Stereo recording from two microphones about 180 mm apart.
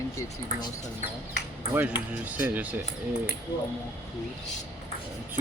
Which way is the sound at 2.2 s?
10° right (ahead or behind).